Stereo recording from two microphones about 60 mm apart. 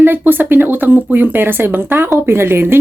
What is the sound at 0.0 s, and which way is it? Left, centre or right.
Speech, right.